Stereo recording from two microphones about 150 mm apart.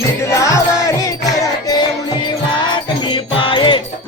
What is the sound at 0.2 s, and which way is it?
Music, 20° left (ahead or behind).